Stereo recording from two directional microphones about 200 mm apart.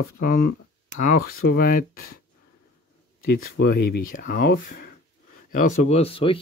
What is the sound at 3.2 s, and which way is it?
Speech, 50° left (ahead or behind).